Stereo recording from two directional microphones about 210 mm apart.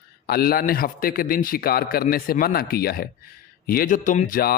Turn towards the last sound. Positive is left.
turn(degrees=45)  # may be behind; listen again after turning